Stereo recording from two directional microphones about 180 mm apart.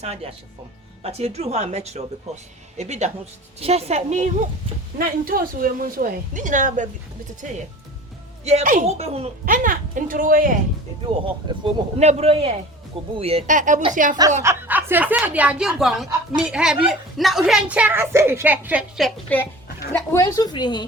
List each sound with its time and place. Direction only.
0.0 s speech: 35° right (ahead or behind)
4.9 s a woman's voice: 55° right (ahead or behind)
11.9 s a woman's voice: 35° right (ahead or behind)
14.4 s a woman's voice: 10° right (ahead or behind); by 20.8 s 25° left (ahead or behind)